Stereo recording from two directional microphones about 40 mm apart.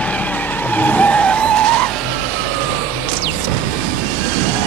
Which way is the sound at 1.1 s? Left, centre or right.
Left.